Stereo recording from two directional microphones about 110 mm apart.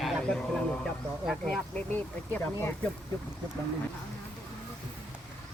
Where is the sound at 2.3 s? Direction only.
25° left (ahead or behind).